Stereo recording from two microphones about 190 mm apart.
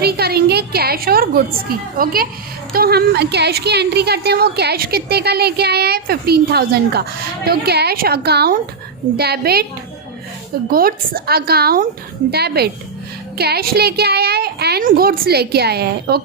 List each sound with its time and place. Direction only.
0.0 s a sound: 55° right (ahead or behind)
2.0 s speech: 50° right (ahead or behind)
10.7 s speech: 50° right (ahead or behind)